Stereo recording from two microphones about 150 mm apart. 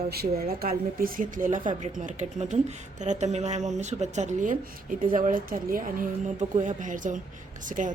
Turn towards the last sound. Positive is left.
turn(degrees=-60)  # may be behind; listen again after turning